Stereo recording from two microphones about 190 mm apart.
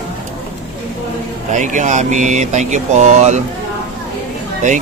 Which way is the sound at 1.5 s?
40° right (ahead or behind).